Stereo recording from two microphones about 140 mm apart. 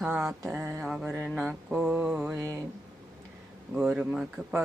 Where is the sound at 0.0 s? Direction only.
5° right (ahead or behind).